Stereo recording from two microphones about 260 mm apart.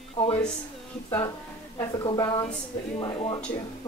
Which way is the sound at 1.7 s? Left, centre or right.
Centre.